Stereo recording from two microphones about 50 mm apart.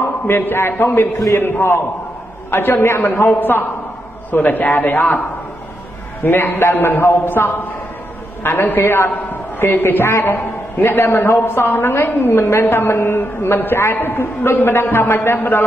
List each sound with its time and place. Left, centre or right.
0.3 s a man's voice: left
3.3 s a man's voice: left
6.2 s a man's voice: left
8.6 s a man's voice: left
9.3 s a sound: left
10.2 s a man's voice: left